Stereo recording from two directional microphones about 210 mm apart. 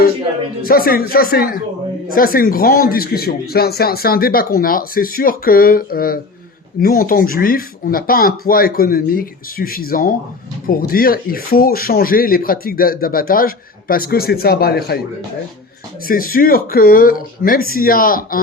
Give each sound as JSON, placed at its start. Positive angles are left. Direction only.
{"t": 0.6, "sound": "speech", "side_deg": 45}
{"t": 16.0, "sound": "speech", "side_deg": 45}